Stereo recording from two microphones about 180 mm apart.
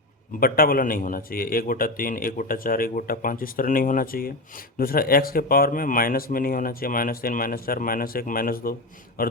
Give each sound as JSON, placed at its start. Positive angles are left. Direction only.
{"t": 0.3, "sound": "a man's voice", "side_deg": 55}